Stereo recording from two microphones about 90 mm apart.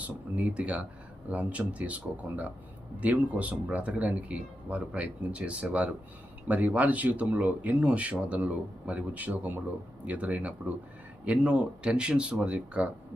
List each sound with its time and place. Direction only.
0.3 s speech: 15° right (ahead or behind)